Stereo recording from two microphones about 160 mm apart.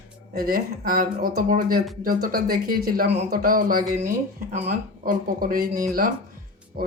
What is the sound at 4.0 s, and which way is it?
Speech, 50° right (ahead or behind).